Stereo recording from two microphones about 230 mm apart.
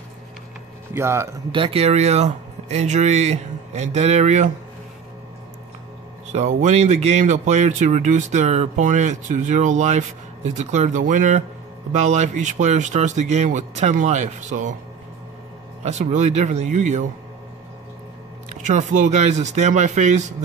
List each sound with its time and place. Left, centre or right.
0.9 s speech: centre
1.6 s speech: right
6.2 s speech: right
15.8 s speech: right
18.7 s speech: right